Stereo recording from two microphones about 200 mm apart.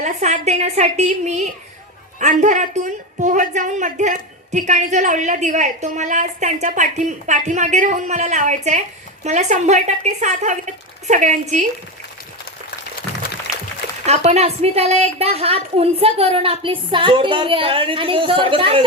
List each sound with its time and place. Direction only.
0.0 s a woman's voice: 35° right (ahead or behind)
14.1 s a woman's voice: 35° right (ahead or behind)